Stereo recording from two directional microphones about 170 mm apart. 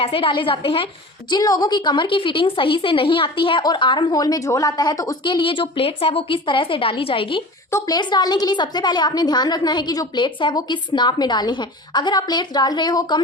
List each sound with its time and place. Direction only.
0.0 s a woman's voice: 30° left (ahead or behind)
1.3 s a woman's voice: 20° left (ahead or behind)